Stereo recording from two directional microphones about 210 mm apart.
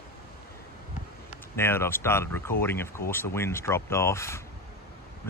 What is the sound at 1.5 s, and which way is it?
Speech, 10° left (ahead or behind).